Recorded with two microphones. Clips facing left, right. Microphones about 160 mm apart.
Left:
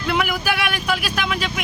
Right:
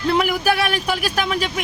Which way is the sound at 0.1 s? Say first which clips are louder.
Right 3 dB; 30° right (ahead or behind).